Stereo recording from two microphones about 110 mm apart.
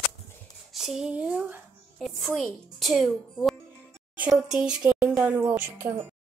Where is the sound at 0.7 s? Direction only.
Centre (ahead or behind).